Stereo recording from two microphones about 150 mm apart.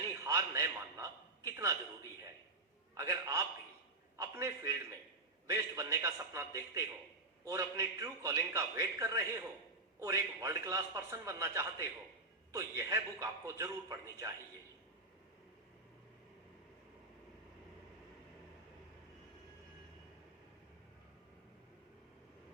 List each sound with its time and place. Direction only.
0.3 s a man's voice: 20° right (ahead or behind)
2.9 s a man's voice: 20° right (ahead or behind)